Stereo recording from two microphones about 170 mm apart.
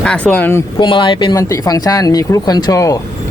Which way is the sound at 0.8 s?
30° left (ahead or behind).